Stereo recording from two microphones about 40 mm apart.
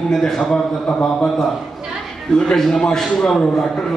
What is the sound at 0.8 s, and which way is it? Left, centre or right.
Speech, left.